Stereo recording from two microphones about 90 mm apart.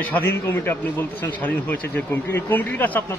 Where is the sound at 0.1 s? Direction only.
25° left (ahead or behind).